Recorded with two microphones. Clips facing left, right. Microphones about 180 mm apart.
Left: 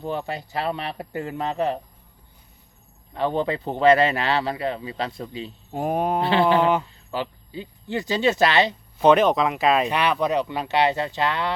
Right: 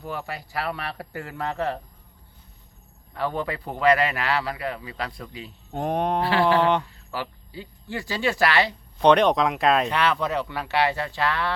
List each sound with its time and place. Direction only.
0.0 s speech: 25° left (ahead or behind)
3.1 s speech: 25° left (ahead or behind)
5.7 s speech: 5° left (ahead or behind)
6.2 s speech: 20° left (ahead or behind)
9.0 s speech: 5° left (ahead or behind)
9.9 s speech: 15° left (ahead or behind)